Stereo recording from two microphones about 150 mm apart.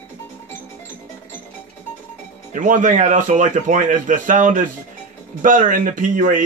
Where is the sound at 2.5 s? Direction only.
55° right (ahead or behind).